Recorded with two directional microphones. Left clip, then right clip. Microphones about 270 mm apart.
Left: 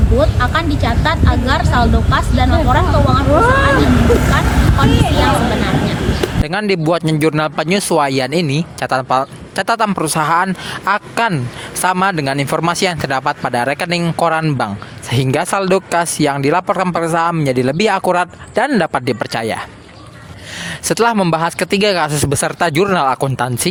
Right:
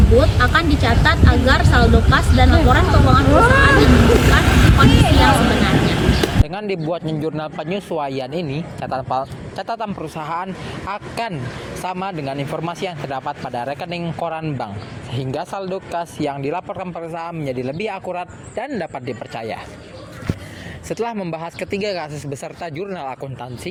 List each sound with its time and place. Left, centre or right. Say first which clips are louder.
0.2 s speech: left 3 dB; centre
4.9 s speech: even; left
5.5 s speech: even; centre
6.5 s a man's voice: left 8 dB; left
20.8 s a man's voice: left 11 dB; left